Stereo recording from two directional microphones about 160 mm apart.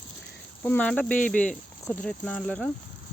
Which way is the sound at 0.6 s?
10° left (ahead or behind).